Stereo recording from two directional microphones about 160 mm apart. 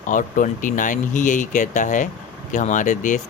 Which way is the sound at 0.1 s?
55° left (ahead or behind).